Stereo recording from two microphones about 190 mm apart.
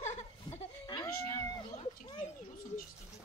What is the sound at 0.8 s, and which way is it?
Cat, 20° left (ahead or behind).